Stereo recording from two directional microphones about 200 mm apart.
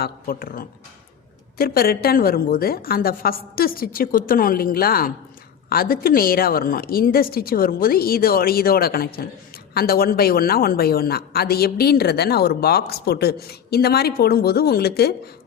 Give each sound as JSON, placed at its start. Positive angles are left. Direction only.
{"t": 0.0, "sound": "a woman's voice", "side_deg": 45}